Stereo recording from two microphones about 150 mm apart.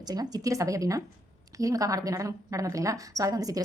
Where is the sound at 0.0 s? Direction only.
25° right (ahead or behind).